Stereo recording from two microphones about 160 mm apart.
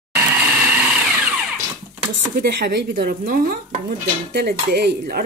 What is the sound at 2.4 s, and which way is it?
Dishes, 85° right.